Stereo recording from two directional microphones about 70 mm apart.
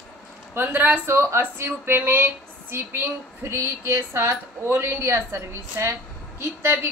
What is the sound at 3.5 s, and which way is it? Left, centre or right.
A woman's voice, right.